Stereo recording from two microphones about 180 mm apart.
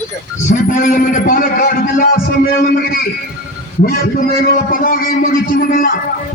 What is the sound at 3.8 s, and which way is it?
A man's voice, 55° left (ahead or behind).